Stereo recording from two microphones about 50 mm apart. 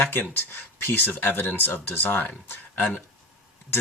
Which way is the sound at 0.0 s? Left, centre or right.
Left.